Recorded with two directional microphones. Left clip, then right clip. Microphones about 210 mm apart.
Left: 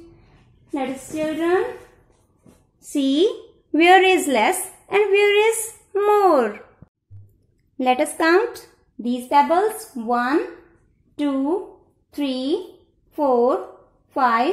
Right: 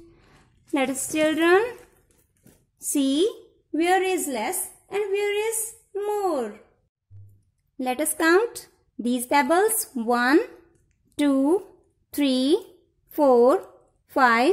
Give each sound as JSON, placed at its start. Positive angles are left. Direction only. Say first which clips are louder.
{"t": 0.7, "sound": "speech", "louder": "right 2 dB", "side_deg": -35}
{"t": 2.8, "sound": "a woman's voice", "louder": "left 4 dB", "side_deg": -30}
{"t": 7.8, "sound": "speech", "louder": "left 5 dB", "side_deg": -25}